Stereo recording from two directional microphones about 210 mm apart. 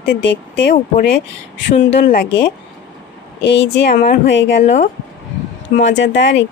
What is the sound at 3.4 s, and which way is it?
Speech, 60° left (ahead or behind).